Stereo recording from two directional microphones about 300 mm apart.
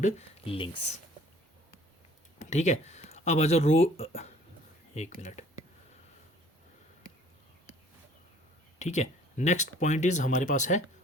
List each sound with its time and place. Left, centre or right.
0.0 s speech: centre
2.5 s speech: left
8.8 s speech: left